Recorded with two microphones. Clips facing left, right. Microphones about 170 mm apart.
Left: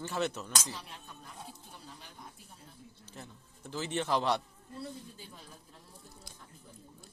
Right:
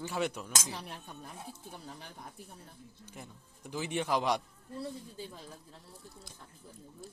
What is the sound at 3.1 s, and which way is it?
Speech, 10° right (ahead or behind).